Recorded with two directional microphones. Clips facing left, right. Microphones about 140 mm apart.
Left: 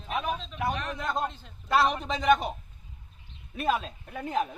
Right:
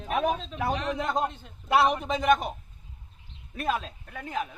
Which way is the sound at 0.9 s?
20° right (ahead or behind).